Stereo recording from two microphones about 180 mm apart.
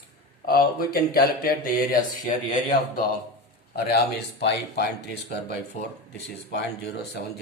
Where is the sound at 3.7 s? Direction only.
65° left (ahead or behind).